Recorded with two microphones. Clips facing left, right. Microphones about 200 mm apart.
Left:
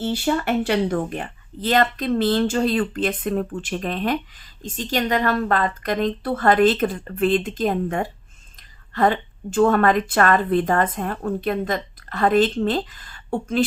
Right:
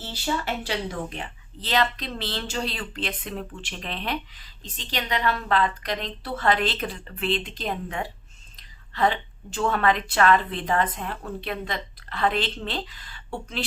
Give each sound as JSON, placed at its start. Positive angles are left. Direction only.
{"t": 0.0, "sound": "speech", "side_deg": 55}